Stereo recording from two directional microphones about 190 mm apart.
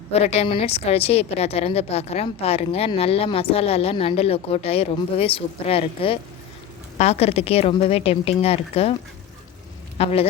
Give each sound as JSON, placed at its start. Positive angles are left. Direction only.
{"t": 0.1, "sound": "a woman's voice", "side_deg": 35}
{"t": 10.0, "sound": "a woman's voice", "side_deg": 30}